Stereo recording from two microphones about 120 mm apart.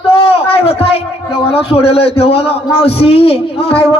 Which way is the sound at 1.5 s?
55° left (ahead or behind).